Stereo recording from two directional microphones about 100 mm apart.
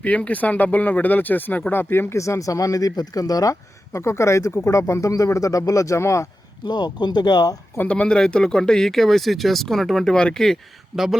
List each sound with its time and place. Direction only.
0.0 s speech: 15° left (ahead or behind); by 6.2 s 30° left (ahead or behind)
6.7 s speech: 45° left (ahead or behind)
7.8 s speech: 15° left (ahead or behind); by 11.2 s 5° right (ahead or behind)